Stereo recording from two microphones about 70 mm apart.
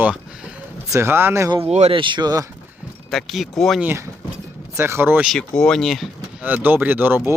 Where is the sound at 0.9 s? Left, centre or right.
Right.